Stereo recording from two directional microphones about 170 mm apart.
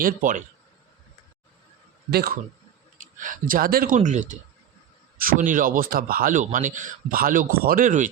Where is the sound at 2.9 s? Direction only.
50° right (ahead or behind).